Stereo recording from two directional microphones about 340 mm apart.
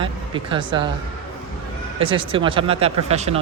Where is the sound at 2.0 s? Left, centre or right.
Centre.